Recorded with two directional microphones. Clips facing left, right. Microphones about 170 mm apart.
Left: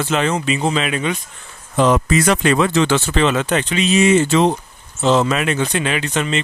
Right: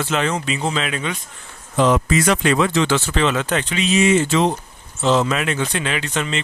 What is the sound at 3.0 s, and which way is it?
Speech, 25° left (ahead or behind).